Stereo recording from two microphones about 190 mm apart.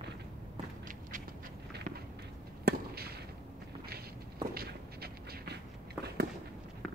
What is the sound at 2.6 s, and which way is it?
Fireworks, 55° right (ahead or behind).